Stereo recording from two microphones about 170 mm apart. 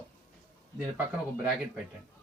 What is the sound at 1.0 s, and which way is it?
Speech, 10° right (ahead or behind).